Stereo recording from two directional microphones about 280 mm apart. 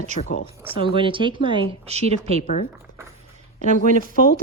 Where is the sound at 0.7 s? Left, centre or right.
Centre.